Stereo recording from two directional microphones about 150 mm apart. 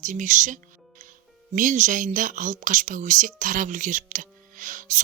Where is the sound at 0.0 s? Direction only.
60° right (ahead or behind).